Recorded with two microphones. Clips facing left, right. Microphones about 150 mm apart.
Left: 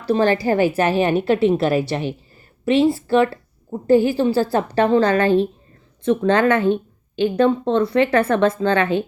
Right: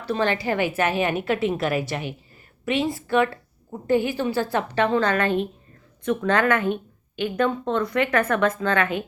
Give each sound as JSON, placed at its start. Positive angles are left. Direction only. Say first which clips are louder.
{"t": 0.0, "sound": "a woman's voice", "louder": "left 6 dB", "side_deg": 35}